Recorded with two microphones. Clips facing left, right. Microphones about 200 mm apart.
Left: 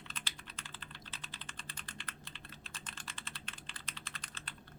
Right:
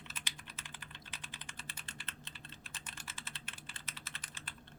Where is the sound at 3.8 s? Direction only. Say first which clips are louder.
Left 1 dB; 5° right (ahead or behind).